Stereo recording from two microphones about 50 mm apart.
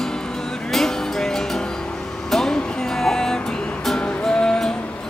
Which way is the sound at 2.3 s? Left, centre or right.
Centre.